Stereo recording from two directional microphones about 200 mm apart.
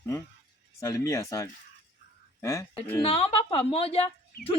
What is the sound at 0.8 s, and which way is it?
Speech, 15° left (ahead or behind).